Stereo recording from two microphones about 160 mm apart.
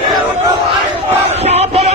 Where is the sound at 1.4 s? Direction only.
40° right (ahead or behind).